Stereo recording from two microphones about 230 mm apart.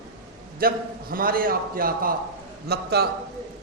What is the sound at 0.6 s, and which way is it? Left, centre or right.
A woman's voice, right.